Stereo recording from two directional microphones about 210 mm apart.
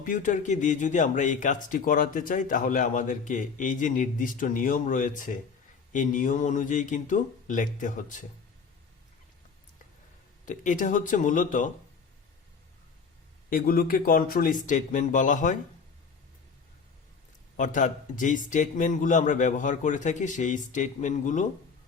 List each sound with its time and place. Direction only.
0.0 s a man's voice: 40° left (ahead or behind)
10.4 s a man's voice: 35° left (ahead or behind)
13.5 s a man's voice: 40° left (ahead or behind)
17.6 s a man's voice: 40° left (ahead or behind)